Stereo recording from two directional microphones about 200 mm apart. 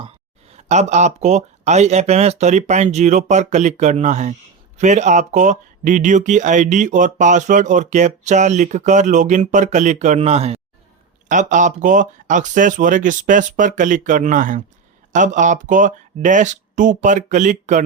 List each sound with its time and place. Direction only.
0.0 s speech: 30° right (ahead or behind)